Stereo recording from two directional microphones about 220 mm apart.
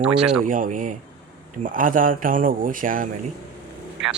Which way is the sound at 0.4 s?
40° right (ahead or behind).